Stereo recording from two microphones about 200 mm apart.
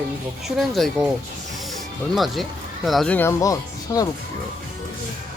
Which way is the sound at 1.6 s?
Centre (ahead or behind).